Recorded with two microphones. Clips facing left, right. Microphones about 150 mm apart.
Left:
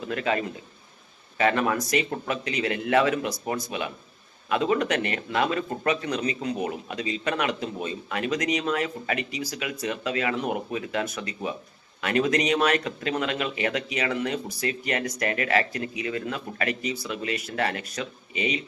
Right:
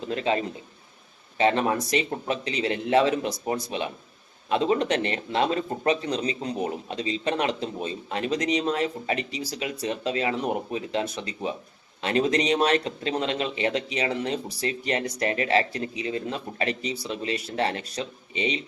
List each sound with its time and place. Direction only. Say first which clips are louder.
0.0 s a man's voice: right 1 dB; 30° right (ahead or behind)